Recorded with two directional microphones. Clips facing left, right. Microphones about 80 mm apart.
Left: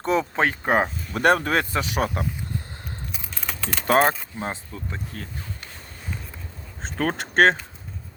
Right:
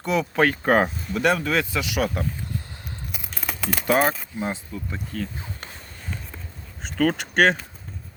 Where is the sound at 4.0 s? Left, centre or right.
Centre.